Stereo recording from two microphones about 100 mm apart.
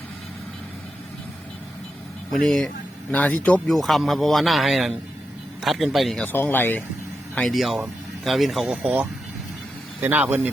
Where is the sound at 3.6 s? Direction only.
Centre (ahead or behind).